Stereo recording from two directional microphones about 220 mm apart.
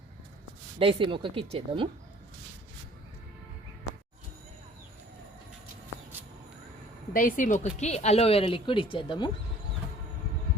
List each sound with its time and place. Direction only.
0.8 s speech: 25° right (ahead or behind)
7.1 s speech: 40° left (ahead or behind); by 9.3 s 20° left (ahead or behind)